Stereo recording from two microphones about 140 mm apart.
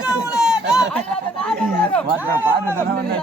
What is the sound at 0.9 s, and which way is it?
Chatter, 5° left (ahead or behind).